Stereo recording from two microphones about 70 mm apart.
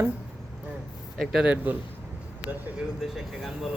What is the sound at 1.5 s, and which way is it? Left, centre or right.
Speech, right.